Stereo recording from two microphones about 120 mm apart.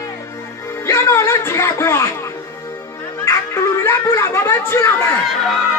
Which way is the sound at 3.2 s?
25° left (ahead or behind).